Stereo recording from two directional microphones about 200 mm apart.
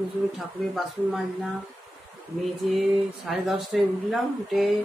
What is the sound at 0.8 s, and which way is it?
Speech, centre (ahead or behind).